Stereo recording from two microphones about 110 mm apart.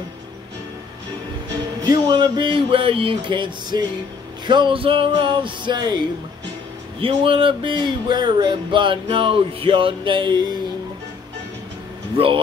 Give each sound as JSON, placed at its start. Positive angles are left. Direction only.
{"t": 1.9, "sound": "speech", "side_deg": -40}
{"t": 7.0, "sound": "speech", "side_deg": -55}